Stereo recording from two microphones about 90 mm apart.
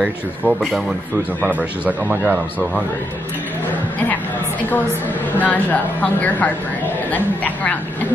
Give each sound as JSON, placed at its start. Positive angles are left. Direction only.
{"t": 0.0, "sound": "speech", "side_deg": 0}
{"t": 1.4, "sound": "speech", "side_deg": -15}
{"t": 5.4, "sound": "a woman's voice", "side_deg": 15}